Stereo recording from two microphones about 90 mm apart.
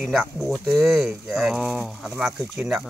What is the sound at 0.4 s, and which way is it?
Speech, 30° right (ahead or behind).